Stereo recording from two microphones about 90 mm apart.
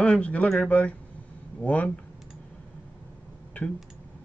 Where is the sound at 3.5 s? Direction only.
15° left (ahead or behind).